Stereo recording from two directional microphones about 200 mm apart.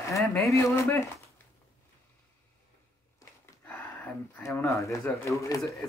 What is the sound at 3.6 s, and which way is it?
Speech, 5° left (ahead or behind).